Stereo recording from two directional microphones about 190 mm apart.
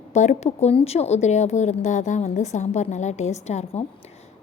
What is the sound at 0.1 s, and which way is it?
A woman's voice, 35° left (ahead or behind).